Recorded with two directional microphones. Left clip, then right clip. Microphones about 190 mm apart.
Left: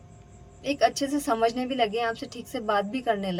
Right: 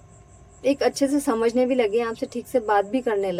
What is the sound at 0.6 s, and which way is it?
A woman's voice, 40° right (ahead or behind).